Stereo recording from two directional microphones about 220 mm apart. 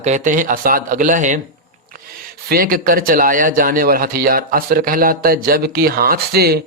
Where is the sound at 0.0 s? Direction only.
35° right (ahead or behind).